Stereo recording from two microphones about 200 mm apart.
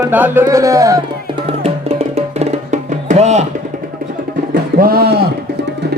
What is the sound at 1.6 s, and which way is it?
Music, 30° right (ahead or behind).